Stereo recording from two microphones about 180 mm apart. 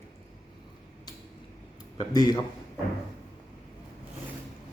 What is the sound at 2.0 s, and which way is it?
Speech, 20° left (ahead or behind).